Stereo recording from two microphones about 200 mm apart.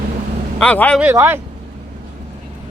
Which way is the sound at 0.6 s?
5° left (ahead or behind).